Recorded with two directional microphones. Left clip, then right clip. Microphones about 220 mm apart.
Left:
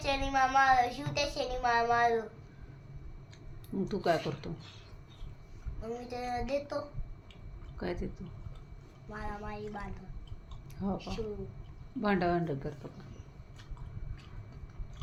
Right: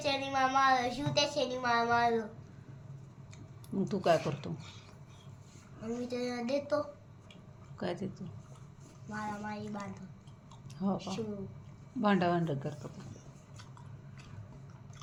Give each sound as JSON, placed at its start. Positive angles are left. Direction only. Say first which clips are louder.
{"t": 0.0, "sound": "a woman's voice", "louder": "left 1 dB", "side_deg": 5}
{"t": 3.8, "sound": "speech", "louder": "right 2 dB", "side_deg": 10}
{"t": 6.1, "sound": "a woman's voice", "louder": "left 1 dB", "side_deg": 5}
{"t": 7.8, "sound": "speech", "louder": "even", "side_deg": 5}
{"t": 9.1, "sound": "a woman's voice", "louder": "right 2 dB", "side_deg": 5}